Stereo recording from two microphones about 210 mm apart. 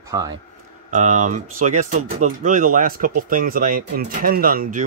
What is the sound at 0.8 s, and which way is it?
Speech, 35° right (ahead or behind).